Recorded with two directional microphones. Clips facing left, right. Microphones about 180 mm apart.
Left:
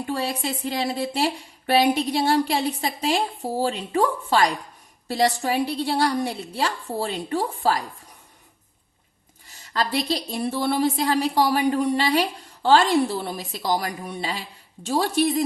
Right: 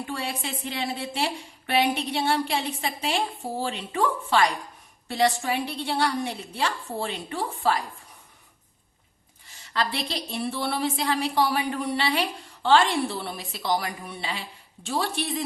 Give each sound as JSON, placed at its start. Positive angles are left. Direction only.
{"t": 0.1, "sound": "a woman's voice", "side_deg": 35}
{"t": 9.5, "sound": "a woman's voice", "side_deg": 40}